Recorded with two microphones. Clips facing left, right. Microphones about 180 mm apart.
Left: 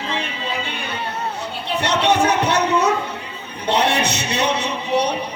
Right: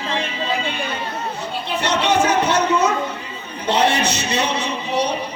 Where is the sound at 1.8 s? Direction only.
60° left (ahead or behind).